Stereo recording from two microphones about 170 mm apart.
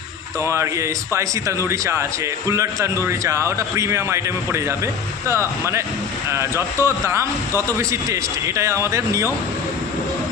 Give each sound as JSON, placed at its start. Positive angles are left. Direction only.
{"t": 0.4, "sound": "a man's voice", "side_deg": -15}